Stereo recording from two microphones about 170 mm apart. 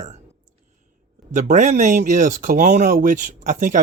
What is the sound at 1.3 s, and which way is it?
Speech, 45° right (ahead or behind).